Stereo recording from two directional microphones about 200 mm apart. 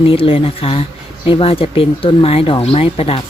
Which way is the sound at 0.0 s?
30° left (ahead or behind).